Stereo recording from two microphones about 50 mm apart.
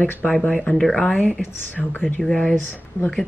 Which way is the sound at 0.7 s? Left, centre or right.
Centre.